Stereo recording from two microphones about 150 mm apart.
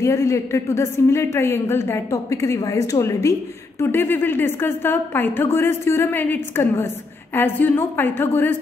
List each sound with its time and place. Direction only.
0.0 s a woman's voice: 20° left (ahead or behind)